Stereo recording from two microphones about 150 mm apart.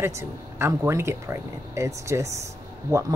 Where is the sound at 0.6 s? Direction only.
20° right (ahead or behind).